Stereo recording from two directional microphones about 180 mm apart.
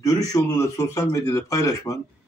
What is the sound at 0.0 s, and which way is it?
Speech, 20° left (ahead or behind).